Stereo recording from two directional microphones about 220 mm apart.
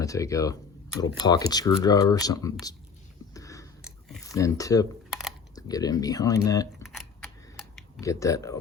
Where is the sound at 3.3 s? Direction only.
15° left (ahead or behind).